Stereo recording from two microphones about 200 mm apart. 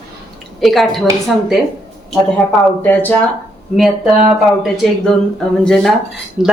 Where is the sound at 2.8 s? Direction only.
10° left (ahead or behind).